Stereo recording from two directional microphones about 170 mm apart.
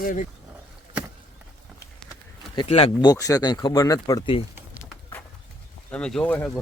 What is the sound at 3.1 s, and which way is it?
Speech, 20° left (ahead or behind).